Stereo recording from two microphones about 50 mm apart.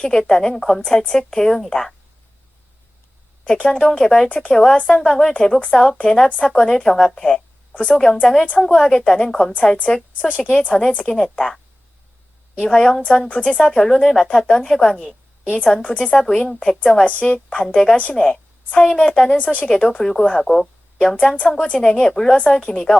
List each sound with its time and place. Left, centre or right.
0.0 s speech: centre
3.4 s a woman's voice: centre
4.3 s a woman's voice: left
4.9 s a woman's voice: centre
7.7 s a woman's voice: left
7.9 s a woman's voice: centre
12.5 s a woman's voice: left
16.1 s a woman's voice: centre
16.6 s a woman's voice: centre
21.2 s a woman's voice: left
21.8 s speech: centre